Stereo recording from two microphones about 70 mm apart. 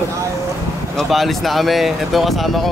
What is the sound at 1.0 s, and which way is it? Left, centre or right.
Speech, centre.